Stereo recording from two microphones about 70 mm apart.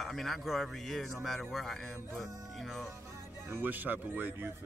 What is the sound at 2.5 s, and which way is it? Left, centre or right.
Music, centre.